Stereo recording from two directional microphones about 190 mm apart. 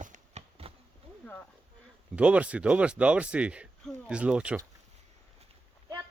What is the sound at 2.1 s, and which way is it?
Speech, 5° right (ahead or behind).